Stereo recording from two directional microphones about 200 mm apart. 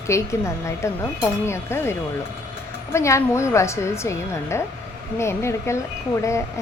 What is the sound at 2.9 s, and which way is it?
A woman's voice, 15° left (ahead or behind).